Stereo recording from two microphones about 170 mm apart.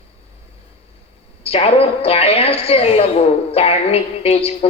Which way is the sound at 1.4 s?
35° left (ahead or behind).